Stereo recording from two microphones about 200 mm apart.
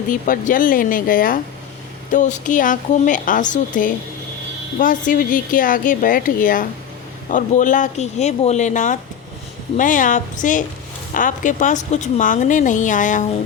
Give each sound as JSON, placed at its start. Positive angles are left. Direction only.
{"t": 0.1, "sound": "a woman's voice", "side_deg": 40}